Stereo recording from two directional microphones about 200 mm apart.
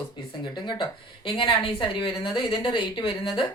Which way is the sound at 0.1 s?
25° left (ahead or behind).